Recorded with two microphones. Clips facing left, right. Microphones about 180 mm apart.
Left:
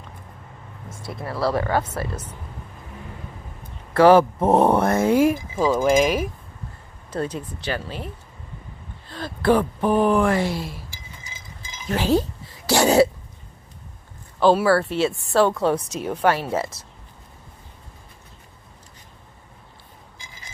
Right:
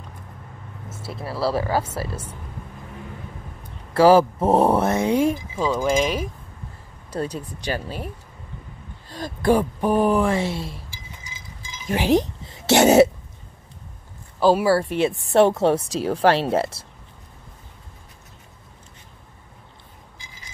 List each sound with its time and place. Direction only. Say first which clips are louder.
0.8 s vehicle: even; 5° right (ahead or behind)
1.5 s speech: left 1 dB; 10° right (ahead or behind)
3.9 s speech: left 1 dB; 30° right (ahead or behind)
4.2 s speech: even; 10° right (ahead or behind)
5.1 s speech: left 2 dB; 5° left (ahead or behind)
7.2 s speech: even; 40° right (ahead or behind)
9.2 s speech: even; 15° right (ahead or behind)
10.9 s a sound: right 1 dB; 50° left (ahead or behind)
11.9 s throat clearing: right 1 dB; 15° right (ahead or behind)
14.4 s speech: even; 10° right (ahead or behind); by 16.3 s 30° right (ahead or behind)
16.3 s speech: right 4 dB; 70° right (ahead or behind)